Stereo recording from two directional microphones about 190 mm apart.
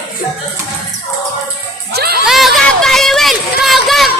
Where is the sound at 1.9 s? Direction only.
55° right (ahead or behind).